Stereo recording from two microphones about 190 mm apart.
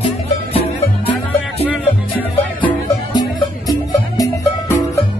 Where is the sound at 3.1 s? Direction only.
20° left (ahead or behind).